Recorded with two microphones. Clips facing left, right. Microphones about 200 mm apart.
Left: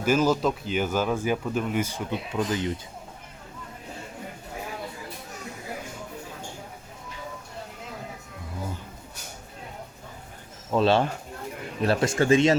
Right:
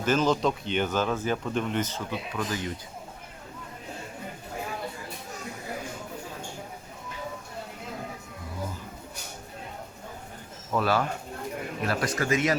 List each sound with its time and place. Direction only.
0.0 s speech: 10° left (ahead or behind)
2.0 s speech: 20° left (ahead or behind)
10.7 s speech: 25° left (ahead or behind)